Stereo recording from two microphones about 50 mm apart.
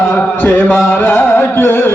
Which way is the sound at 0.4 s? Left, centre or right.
Left.